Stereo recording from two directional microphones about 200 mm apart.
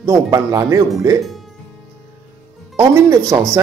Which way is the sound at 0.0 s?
15° right (ahead or behind).